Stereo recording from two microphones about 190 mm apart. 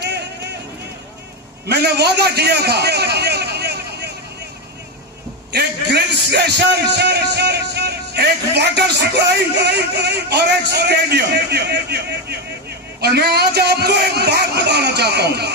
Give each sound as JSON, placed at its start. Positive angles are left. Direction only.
{"t": 1.7, "sound": "a man's voice", "side_deg": -60}
{"t": 5.5, "sound": "a man's voice", "side_deg": -60}